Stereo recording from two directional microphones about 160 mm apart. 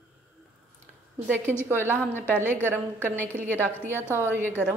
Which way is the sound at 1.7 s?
15° right (ahead or behind).